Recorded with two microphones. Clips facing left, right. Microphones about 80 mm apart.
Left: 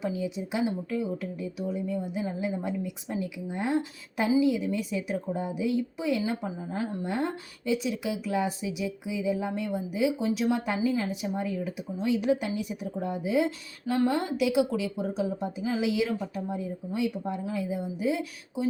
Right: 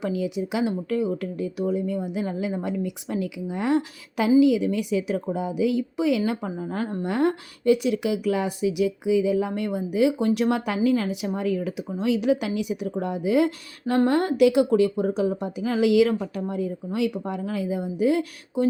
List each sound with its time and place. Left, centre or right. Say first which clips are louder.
0.0 s speech: right 5 dB; right
10.8 s speech: right 5 dB; right